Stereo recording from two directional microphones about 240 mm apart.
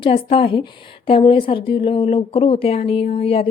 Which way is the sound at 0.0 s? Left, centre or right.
Left.